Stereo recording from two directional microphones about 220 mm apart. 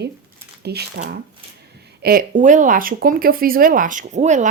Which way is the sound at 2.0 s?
40° right (ahead or behind).